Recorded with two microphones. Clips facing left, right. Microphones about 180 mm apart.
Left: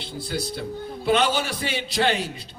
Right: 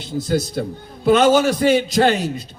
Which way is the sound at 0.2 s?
45° right (ahead or behind).